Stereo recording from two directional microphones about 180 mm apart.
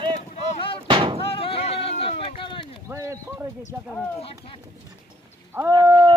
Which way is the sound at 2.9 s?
15° right (ahead or behind).